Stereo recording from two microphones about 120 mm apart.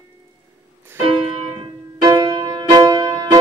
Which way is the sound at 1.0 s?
40° right (ahead or behind).